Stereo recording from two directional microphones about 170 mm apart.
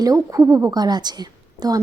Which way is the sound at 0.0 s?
15° right (ahead or behind).